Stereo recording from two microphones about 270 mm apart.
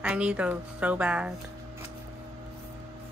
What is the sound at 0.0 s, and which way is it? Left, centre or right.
Speech, centre.